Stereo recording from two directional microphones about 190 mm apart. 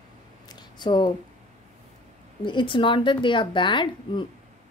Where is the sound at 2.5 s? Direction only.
25° left (ahead or behind).